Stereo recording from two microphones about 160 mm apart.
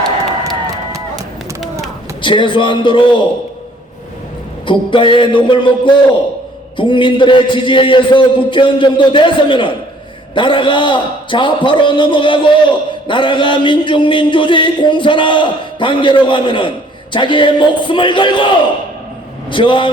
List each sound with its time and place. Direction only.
2.2 s a man's voice: 30° left (ahead or behind)
4.6 s a man's voice: 30° left (ahead or behind)